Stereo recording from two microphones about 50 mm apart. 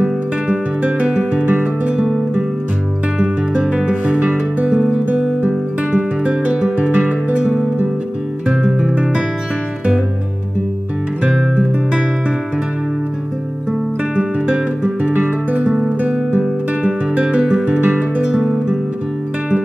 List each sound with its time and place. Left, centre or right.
0.0 s music: right
3.7 s music: right
5.4 s music: right
8.5 s music: centre
14.1 s music: right
15.6 s guitar: centre
16.3 s music: right